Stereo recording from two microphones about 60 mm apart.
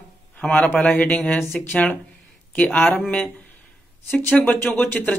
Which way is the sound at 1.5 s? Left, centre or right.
Left.